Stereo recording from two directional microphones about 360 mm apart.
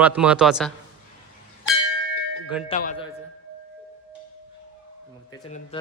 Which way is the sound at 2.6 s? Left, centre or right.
Left.